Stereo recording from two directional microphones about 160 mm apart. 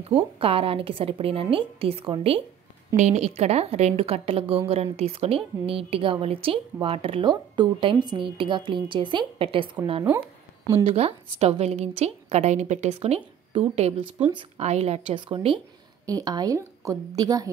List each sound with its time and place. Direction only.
0.0 s a woman's voice: 35° right (ahead or behind)
10.7 s a woman's voice: 35° right (ahead or behind)